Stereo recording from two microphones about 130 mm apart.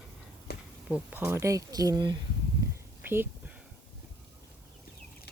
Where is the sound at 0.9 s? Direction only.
10° right (ahead or behind); by 2.1 s 30° right (ahead or behind).